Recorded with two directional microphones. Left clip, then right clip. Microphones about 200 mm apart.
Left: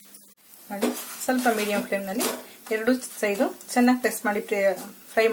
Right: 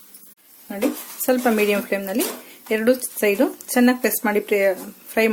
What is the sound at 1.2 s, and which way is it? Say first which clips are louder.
Speech: right 5 dB; 50° right (ahead or behind).